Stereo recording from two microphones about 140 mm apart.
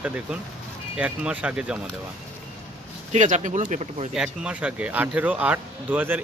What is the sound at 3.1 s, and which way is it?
Speech, 60° right (ahead or behind).